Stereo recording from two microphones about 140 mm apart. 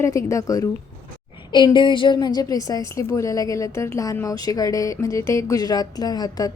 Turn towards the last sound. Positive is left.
turn(degrees=30)  # may be behind; listen again after turning